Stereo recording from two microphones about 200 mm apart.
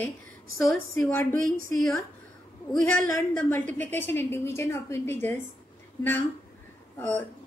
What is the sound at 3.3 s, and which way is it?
A woman's voice, 10° left (ahead or behind).